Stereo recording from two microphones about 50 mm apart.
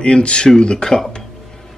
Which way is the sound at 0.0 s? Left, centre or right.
Left.